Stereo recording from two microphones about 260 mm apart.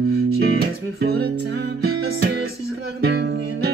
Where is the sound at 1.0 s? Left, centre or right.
Right.